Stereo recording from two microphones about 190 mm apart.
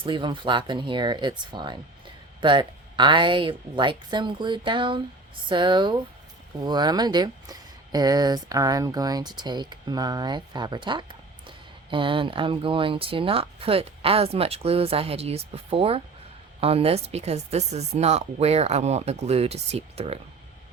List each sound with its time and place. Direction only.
0.0 s speech: 25° right (ahead or behind)